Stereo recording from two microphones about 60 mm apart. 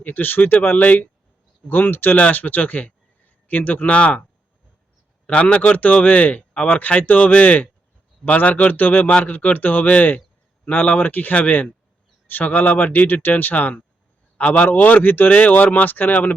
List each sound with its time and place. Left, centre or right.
0.0 s speech: left
2.1 s a man's voice: left
5.2 s a man's voice: centre